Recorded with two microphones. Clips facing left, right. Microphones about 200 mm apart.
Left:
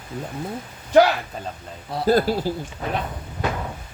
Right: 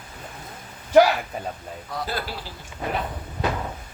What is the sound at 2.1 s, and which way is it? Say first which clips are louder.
Speech: left 13 dB; 45° left (ahead or behind).